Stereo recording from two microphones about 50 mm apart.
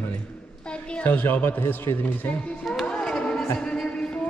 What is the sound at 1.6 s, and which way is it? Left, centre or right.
Speech, left.